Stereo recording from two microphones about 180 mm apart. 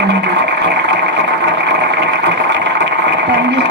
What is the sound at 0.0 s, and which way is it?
Sewing machine, 75° right (ahead or behind).